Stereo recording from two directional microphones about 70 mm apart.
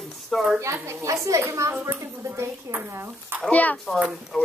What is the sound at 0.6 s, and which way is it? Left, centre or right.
Speech, right.